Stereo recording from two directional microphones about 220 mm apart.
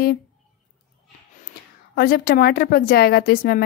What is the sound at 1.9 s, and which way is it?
Speech, 45° left (ahead or behind).